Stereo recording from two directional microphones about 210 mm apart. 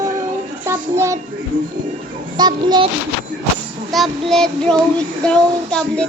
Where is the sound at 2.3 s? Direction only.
20° right (ahead or behind).